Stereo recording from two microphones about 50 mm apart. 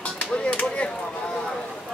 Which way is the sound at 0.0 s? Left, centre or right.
Left.